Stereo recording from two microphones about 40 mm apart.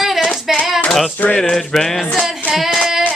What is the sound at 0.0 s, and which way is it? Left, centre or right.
Hands, centre.